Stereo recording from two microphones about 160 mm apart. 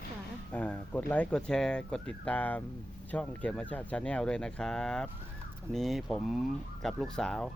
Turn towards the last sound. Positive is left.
turn(degrees=5)  # may be behind; listen again after turning